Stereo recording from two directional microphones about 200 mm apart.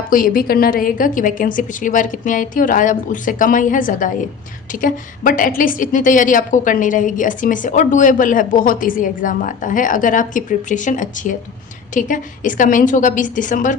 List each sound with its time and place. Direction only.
0.1 s a woman's voice: 45° left (ahead or behind)